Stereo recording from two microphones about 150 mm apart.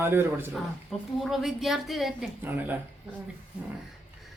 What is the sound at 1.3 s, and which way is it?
A woman's voice, centre (ahead or behind).